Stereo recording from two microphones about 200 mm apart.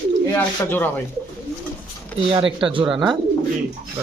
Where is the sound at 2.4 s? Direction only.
25° right (ahead or behind).